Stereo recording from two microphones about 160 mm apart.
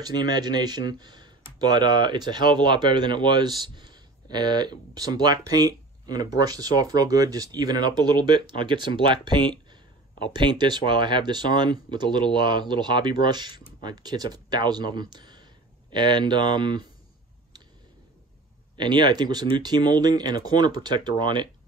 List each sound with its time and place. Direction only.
0.0 s speech: 25° right (ahead or behind)
18.8 s speech: 25° right (ahead or behind)